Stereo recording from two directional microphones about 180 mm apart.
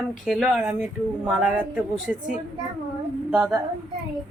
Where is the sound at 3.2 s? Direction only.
10° right (ahead or behind).